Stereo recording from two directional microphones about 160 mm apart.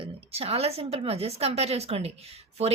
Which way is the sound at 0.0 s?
40° right (ahead or behind).